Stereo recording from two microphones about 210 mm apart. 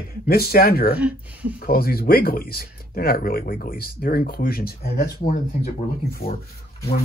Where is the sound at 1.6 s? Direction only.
45° left (ahead or behind).